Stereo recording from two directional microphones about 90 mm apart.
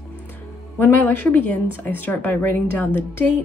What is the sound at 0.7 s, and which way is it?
A woman's voice, 20° left (ahead or behind).